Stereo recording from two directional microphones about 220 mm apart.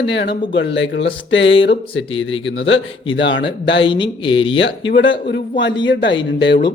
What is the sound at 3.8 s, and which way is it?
Speech, 20° left (ahead or behind).